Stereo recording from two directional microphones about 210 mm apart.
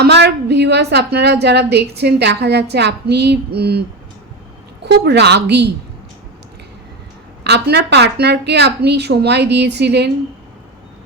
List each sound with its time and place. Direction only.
0.0 s a woman's voice: 50° right (ahead or behind)
4.9 s a woman's voice: 55° right (ahead or behind)
7.4 s a woman's voice: 50° right (ahead or behind)